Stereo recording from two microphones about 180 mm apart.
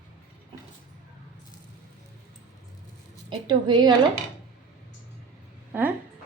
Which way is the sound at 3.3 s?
25° right (ahead or behind).